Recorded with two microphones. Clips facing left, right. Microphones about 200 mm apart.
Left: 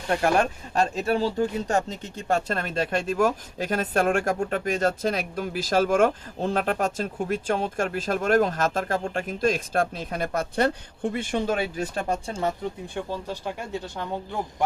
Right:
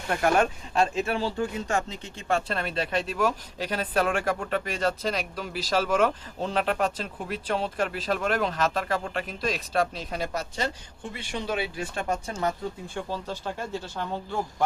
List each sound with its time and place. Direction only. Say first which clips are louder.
0.2 s speech: right 3 dB; 40° left (ahead or behind)
12.9 s speech: left 2 dB; 15° left (ahead or behind)